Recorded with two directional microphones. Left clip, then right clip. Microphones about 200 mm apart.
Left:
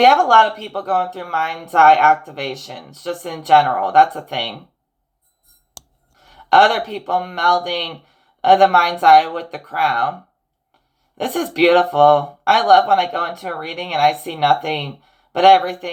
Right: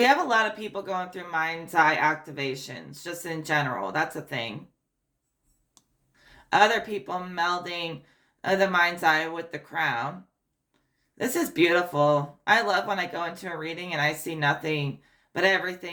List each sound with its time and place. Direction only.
0.0 s speech: 15° right (ahead or behind)
6.5 s speech: 15° right (ahead or behind)
11.2 s speech: 15° right (ahead or behind)